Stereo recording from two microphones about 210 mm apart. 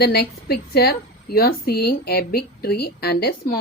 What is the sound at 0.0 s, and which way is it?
A woman's voice, 50° left (ahead or behind).